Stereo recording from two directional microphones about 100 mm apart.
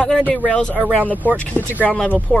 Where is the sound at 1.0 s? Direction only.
15° left (ahead or behind).